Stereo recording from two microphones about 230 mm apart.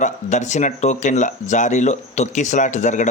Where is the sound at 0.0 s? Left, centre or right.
Left.